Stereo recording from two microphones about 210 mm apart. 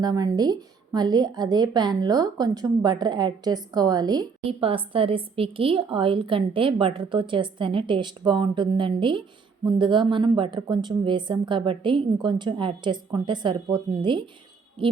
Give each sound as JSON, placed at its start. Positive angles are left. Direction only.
{"t": 0.0, "sound": "a woman's voice", "side_deg": -20}